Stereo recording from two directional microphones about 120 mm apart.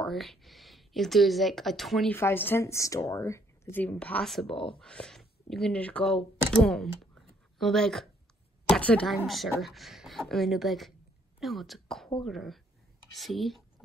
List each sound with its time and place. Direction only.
0.0 s speech: centre (ahead or behind)
2.0 s speech: 20° left (ahead or behind)
3.7 s a woman's voice: 10° left (ahead or behind)